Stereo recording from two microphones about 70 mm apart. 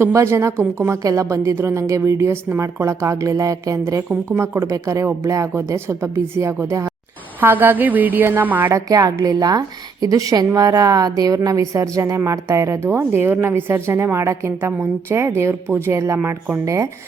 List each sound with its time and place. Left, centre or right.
0.0 s a woman's voice: right
3.0 s speech: right
4.3 s a woman's voice: right
7.4 s a woman's voice: right
8.7 s a woman's voice: right